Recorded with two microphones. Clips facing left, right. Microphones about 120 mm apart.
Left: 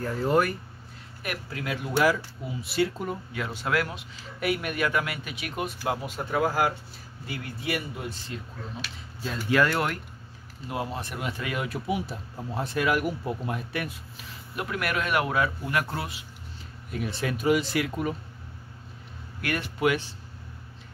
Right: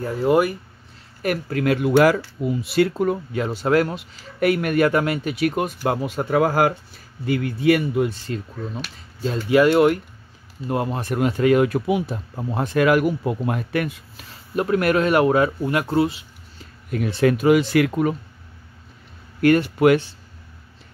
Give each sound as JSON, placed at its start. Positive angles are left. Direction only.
{"t": 0.0, "sound": "speech", "side_deg": -15}
{"t": 1.2, "sound": "speech", "side_deg": -45}
{"t": 1.6, "sound": "speech", "side_deg": -70}
{"t": 3.3, "sound": "speech", "side_deg": -35}
{"t": 4.4, "sound": "speech", "side_deg": -55}
{"t": 4.8, "sound": "speech", "side_deg": -35}
{"t": 5.6, "sound": "speech", "side_deg": -55}
{"t": 9.5, "sound": "speech", "side_deg": -20}
{"t": 10.7, "sound": "speech", "side_deg": -50}
{"t": 12.1, "sound": "speech", "side_deg": -65}
{"t": 14.5, "sound": "speech", "side_deg": -35}
{"t": 15.7, "sound": "speech", "side_deg": -25}
{"t": 16.9, "sound": "speech", "side_deg": -65}
{"t": 19.4, "sound": "speech", "side_deg": -50}